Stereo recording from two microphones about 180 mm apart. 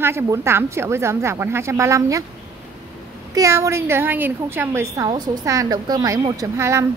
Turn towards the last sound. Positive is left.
turn(degrees=-15)  # may be behind; listen again after turning